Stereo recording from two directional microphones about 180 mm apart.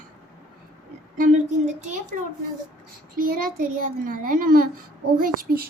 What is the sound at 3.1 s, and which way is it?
A child's voice, 55° right (ahead or behind).